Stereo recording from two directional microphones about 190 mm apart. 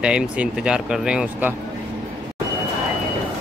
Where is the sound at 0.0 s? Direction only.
5° right (ahead or behind).